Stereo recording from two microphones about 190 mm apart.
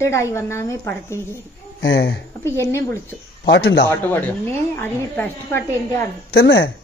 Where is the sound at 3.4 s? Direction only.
65° left (ahead or behind).